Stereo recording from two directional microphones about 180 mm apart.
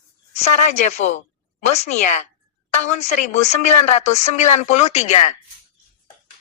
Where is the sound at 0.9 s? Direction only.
40° left (ahead or behind).